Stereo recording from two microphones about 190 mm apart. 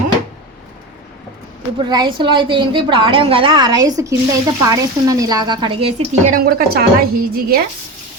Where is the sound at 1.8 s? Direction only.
25° right (ahead or behind).